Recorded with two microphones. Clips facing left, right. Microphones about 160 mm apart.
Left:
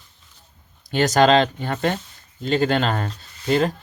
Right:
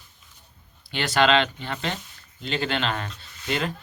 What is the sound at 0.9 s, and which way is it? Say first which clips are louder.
Speech: left 5 dB; 45° left (ahead or behind).